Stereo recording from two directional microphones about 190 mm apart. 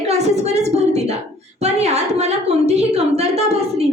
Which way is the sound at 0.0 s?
35° right (ahead or behind).